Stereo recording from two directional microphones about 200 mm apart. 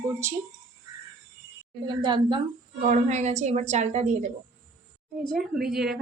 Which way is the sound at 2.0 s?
20° right (ahead or behind).